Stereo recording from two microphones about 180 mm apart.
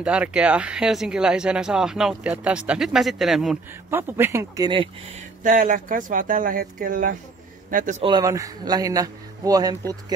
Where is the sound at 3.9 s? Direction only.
10° right (ahead or behind).